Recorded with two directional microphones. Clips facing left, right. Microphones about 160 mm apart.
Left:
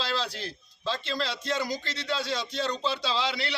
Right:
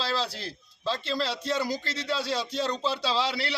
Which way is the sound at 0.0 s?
35° right (ahead or behind).